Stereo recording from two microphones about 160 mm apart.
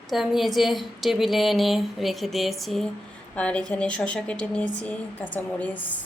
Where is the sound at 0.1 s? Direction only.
Centre (ahead or behind).